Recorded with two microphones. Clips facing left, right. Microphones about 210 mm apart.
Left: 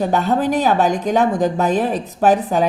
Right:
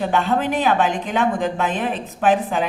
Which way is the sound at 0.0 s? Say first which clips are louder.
Left 3 dB; 40° left (ahead or behind).